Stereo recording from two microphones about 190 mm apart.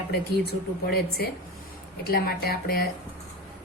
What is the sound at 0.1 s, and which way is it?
A woman's voice, 55° left (ahead or behind).